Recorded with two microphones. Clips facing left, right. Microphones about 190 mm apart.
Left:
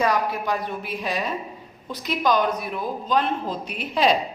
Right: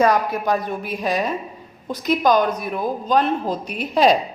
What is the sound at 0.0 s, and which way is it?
A woman's voice, 45° right (ahead or behind).